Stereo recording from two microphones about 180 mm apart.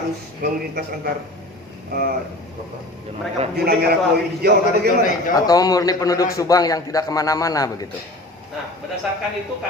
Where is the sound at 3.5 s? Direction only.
60° right (ahead or behind).